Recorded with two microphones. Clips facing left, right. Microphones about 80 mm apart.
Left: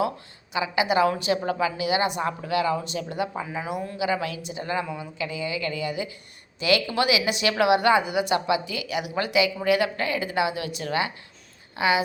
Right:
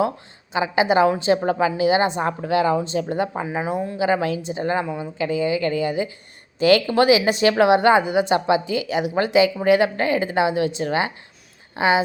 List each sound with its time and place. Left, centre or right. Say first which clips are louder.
0.5 s a woman's voice: right 5 dB; right